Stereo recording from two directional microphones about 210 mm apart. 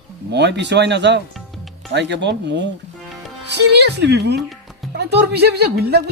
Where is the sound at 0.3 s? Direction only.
55° right (ahead or behind).